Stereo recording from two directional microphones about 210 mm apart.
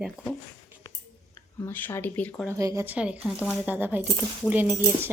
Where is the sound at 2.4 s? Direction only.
15° right (ahead or behind).